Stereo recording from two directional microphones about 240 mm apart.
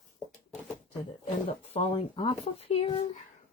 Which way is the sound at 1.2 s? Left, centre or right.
Left.